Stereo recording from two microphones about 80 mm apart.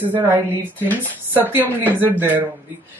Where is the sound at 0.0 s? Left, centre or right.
Right.